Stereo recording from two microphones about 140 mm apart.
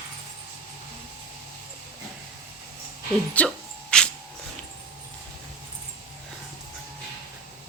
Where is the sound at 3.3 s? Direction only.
5° left (ahead or behind).